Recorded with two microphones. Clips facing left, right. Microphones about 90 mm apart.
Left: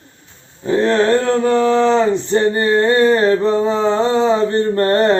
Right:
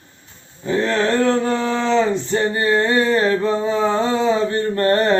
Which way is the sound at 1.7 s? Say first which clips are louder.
Left 4 dB; 30° left (ahead or behind).